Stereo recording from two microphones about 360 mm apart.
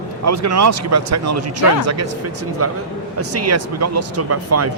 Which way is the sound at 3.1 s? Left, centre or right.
Right.